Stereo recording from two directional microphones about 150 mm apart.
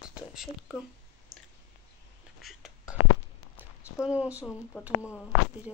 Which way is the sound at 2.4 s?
5° right (ahead or behind).